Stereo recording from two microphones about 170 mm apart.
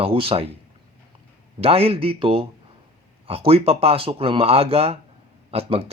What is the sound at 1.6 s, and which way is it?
Speech, 35° right (ahead or behind).